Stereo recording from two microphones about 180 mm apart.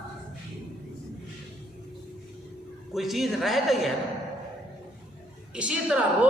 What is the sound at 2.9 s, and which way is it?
A man's voice, centre (ahead or behind).